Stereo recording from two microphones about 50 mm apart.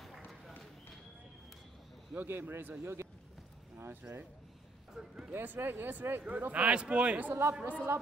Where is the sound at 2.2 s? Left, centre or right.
Right.